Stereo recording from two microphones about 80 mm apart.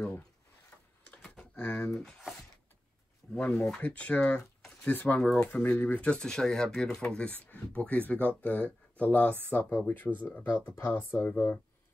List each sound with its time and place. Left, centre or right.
1.1 s typing: centre
2.0 s speech: centre
3.3 s speech: left